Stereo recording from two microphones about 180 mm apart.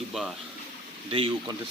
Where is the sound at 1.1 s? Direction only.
30° right (ahead or behind).